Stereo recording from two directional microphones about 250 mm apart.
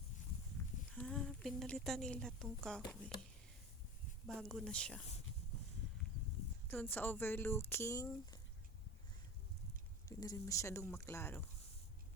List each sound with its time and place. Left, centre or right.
0.6 s a sound: centre
0.9 s a woman's voice: centre
2.8 s speech: centre
4.3 s speech: centre
6.7 s speech: centre
10.1 s speech: centre